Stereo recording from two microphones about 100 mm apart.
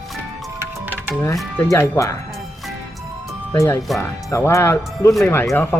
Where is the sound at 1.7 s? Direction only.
30° left (ahead or behind).